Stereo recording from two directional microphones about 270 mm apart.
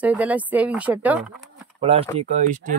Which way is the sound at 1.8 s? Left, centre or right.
Right.